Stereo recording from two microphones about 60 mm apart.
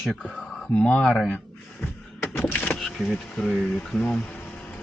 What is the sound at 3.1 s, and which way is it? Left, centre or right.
Speech, centre.